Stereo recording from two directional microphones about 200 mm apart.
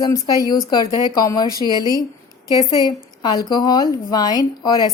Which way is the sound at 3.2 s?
20° left (ahead or behind).